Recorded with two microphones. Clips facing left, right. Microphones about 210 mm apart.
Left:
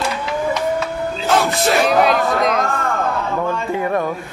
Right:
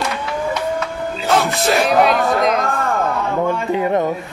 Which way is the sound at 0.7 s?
Centre (ahead or behind).